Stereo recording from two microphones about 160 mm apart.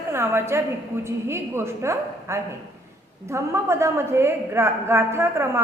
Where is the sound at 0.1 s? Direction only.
15° right (ahead or behind).